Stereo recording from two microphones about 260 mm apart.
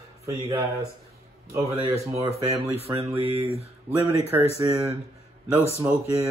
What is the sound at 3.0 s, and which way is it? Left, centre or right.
Speech, right.